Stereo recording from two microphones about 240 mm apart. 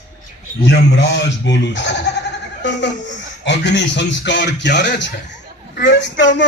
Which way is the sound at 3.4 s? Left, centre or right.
Left.